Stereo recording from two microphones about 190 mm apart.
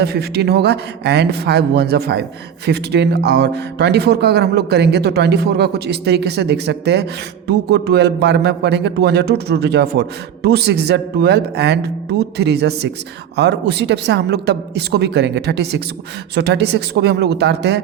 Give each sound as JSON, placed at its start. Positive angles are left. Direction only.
{"t": 0.0, "sound": "speech", "side_deg": -55}